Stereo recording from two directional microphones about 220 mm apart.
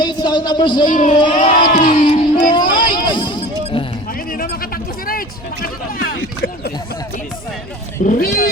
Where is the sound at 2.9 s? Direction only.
20° left (ahead or behind).